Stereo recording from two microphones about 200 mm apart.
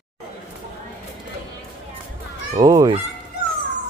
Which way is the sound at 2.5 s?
20° right (ahead or behind).